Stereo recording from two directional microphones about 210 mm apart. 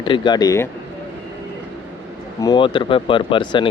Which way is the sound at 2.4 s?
20° left (ahead or behind).